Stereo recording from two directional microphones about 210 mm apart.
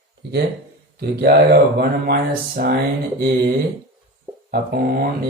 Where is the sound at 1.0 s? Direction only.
50° right (ahead or behind).